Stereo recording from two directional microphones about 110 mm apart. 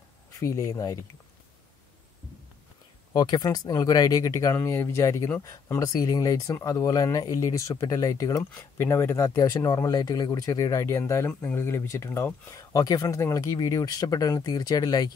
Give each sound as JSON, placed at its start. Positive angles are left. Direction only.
{"t": 0.4, "sound": "speech", "side_deg": 25}
{"t": 3.1, "sound": "speech", "side_deg": 40}